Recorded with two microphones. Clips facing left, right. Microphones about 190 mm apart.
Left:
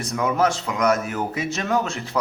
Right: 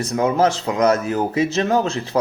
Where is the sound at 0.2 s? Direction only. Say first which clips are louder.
Right 4 dB; 30° right (ahead or behind).